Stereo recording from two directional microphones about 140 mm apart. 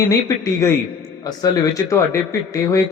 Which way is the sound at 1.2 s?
25° left (ahead or behind).